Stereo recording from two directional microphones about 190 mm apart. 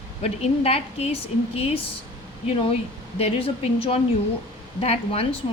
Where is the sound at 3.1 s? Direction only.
30° left (ahead or behind).